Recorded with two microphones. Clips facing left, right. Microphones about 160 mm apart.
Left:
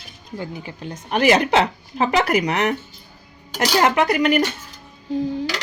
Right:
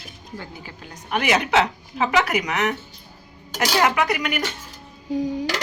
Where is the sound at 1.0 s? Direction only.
35° left (ahead or behind).